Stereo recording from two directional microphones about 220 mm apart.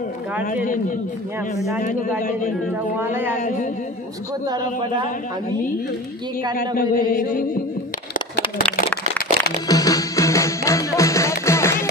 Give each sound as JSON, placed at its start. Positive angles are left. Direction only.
{"t": 1.8, "sound": "speech", "side_deg": 35}
{"t": 3.0, "sound": "speech", "side_deg": -10}
{"t": 3.3, "sound": "speech", "side_deg": 35}
{"t": 6.5, "sound": "speech", "side_deg": 40}
{"t": 9.4, "sound": "music", "side_deg": -50}
{"t": 9.7, "sound": "music", "side_deg": 15}